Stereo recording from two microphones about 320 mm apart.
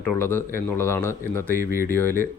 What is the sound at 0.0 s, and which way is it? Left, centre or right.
Speech, centre.